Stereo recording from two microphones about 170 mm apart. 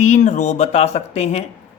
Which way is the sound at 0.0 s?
45° left (ahead or behind).